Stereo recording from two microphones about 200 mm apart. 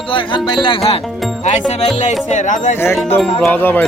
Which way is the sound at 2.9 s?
Centre (ahead or behind).